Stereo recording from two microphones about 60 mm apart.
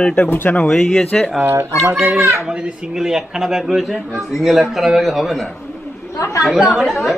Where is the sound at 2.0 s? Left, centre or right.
Right; by 5.5 s centre.